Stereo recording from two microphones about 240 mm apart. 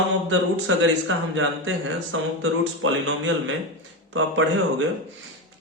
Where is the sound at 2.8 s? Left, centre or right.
Right.